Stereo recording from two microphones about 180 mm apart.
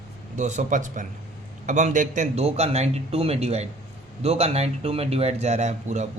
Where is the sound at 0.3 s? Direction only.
40° right (ahead or behind).